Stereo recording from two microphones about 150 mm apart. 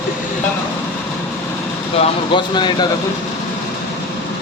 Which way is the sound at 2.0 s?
30° left (ahead or behind).